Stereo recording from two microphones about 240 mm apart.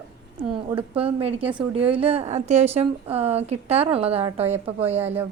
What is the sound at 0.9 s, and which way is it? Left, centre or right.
A woman's voice, right.